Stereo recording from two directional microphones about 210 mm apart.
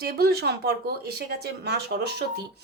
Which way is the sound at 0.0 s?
50° right (ahead or behind).